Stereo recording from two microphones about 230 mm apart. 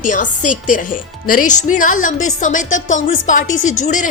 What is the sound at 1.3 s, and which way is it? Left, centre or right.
Speech, left.